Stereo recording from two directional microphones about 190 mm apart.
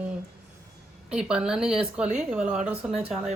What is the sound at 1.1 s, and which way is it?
A woman's voice, 5° right (ahead or behind).